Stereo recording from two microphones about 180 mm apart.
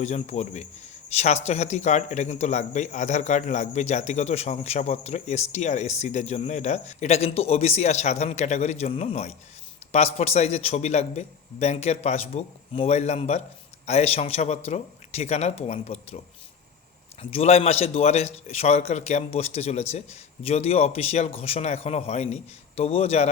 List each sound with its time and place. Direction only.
0.0 s a man's voice: 40° left (ahead or behind)
17.3 s a man's voice: 35° left (ahead or behind)